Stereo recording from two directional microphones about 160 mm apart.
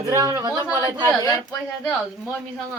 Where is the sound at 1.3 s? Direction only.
20° left (ahead or behind).